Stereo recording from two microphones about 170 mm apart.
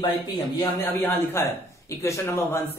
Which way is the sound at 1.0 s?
15° left (ahead or behind).